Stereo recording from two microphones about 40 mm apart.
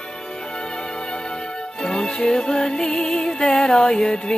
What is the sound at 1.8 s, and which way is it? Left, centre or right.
Music, centre.